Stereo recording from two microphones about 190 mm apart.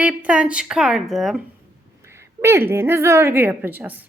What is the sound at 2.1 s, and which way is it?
A woman's voice, 15° right (ahead or behind).